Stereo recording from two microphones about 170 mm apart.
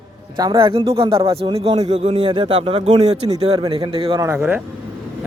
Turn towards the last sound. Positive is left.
turn(degrees=-5)  # may be behind; listen again after turning